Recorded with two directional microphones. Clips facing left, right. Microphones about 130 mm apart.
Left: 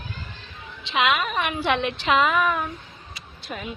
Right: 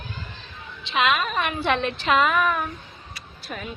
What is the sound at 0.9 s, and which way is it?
A woman's voice, 15° left (ahead or behind).